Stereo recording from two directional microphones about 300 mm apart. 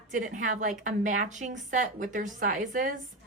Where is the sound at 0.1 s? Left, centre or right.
Right.